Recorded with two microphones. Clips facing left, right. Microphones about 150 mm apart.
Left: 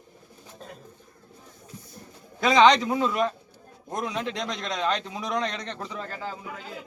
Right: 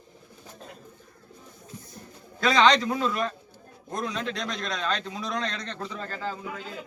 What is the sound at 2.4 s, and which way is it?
A man's voice, 20° left (ahead or behind).